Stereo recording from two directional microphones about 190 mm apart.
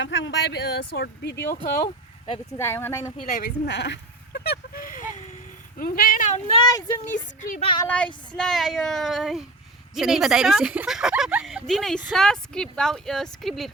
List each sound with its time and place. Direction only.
0.0 s speech: 75° left (ahead or behind); by 1.9 s 55° left (ahead or behind)
2.6 s speech: 10° left (ahead or behind)
3.3 s a sound: 55° left (ahead or behind)
5.8 s speech: 50° left (ahead or behind)
6.6 s speech: 20° left (ahead or behind)
7.9 s speech: 5° left (ahead or behind)